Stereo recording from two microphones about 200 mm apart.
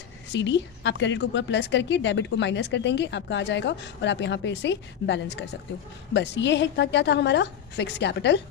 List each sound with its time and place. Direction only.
0.3 s a woman's voice: 60° left (ahead or behind)